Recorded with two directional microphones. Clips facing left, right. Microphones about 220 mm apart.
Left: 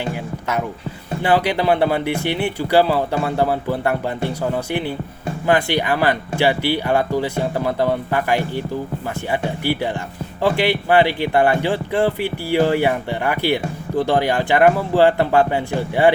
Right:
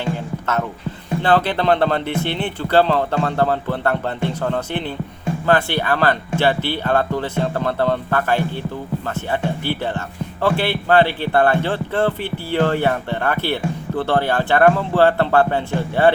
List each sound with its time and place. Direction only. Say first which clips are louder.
0.0 s music: right 1 dB; 15° left (ahead or behind)
1.2 s speech: even; 10° left (ahead or behind)